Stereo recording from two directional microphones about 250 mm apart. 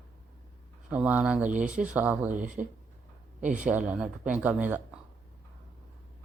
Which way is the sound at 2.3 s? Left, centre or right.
Right.